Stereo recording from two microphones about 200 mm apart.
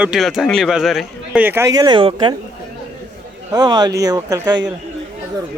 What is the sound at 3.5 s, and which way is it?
Speech, 20° right (ahead or behind).